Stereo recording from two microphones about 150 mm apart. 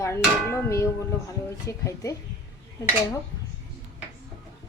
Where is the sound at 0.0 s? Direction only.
20° left (ahead or behind).